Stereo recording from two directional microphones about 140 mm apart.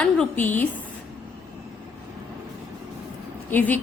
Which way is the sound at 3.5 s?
10° left (ahead or behind).